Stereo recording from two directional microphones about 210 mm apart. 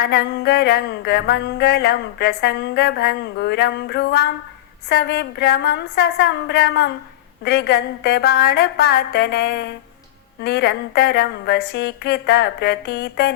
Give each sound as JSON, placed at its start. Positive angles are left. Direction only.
{"t": 0.0, "sound": "music", "side_deg": 50}